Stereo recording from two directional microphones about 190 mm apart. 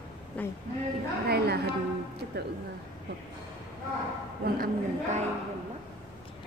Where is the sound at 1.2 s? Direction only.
55° right (ahead or behind).